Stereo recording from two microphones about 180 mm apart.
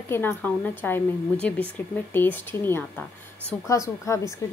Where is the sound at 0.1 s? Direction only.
10° left (ahead or behind).